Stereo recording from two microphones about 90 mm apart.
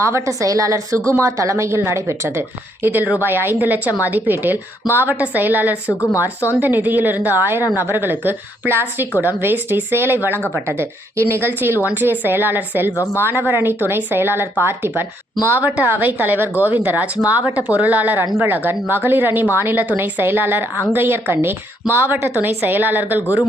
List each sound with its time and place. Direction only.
0.0 s speech: 35° right (ahead or behind)
3.2 s speech: 25° right (ahead or behind)
6.1 s speech: 35° left (ahead or behind)
6.6 s speech: 20° right (ahead or behind)
7.6 s speech: 40° left (ahead or behind)
7.9 s speech: 25° right (ahead or behind)